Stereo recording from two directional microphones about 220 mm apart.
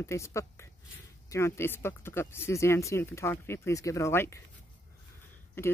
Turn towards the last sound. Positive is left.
turn(degrees=10)  # may be behind; listen again after turning